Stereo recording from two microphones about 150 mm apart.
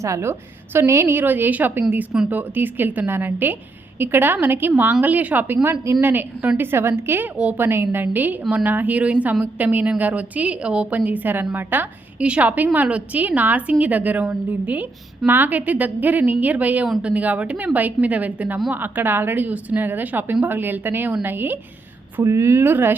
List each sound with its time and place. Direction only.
0.0 s a woman's voice: 20° right (ahead or behind)